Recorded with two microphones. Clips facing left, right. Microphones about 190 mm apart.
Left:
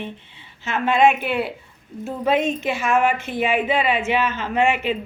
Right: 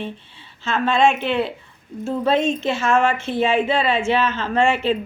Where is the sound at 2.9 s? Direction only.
25° right (ahead or behind).